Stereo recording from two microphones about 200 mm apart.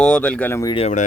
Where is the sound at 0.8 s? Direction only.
35° left (ahead or behind).